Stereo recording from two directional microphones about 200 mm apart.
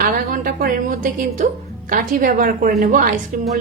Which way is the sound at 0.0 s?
45° right (ahead or behind).